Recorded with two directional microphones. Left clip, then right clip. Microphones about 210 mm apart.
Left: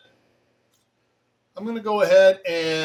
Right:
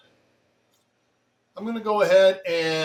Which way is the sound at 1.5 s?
15° left (ahead or behind).